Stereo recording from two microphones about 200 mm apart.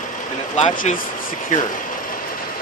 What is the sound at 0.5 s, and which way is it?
Speech, 35° left (ahead or behind).